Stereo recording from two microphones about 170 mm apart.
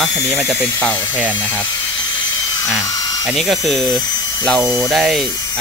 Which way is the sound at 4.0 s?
25° left (ahead or behind).